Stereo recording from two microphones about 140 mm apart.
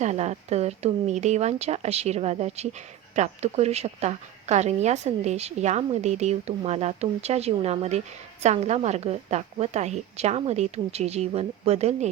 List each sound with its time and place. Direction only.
0.0 s speech: 55° right (ahead or behind)